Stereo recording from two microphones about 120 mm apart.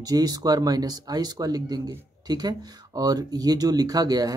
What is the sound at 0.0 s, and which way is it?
Speech, 35° right (ahead or behind).